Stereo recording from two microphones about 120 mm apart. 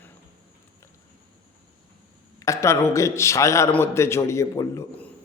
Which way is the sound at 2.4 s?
25° left (ahead or behind).